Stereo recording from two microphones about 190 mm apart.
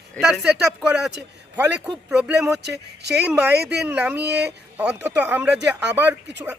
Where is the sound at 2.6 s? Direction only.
60° right (ahead or behind).